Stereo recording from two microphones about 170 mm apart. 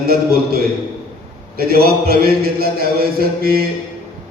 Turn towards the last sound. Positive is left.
turn(degrees=-60)  # may be behind; listen again after turning